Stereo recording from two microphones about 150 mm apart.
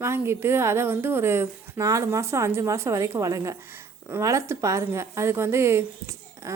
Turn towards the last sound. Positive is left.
turn(degrees=-20)  # may be behind; listen again after turning